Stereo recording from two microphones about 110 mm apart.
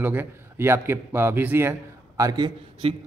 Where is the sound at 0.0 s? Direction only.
15° right (ahead or behind).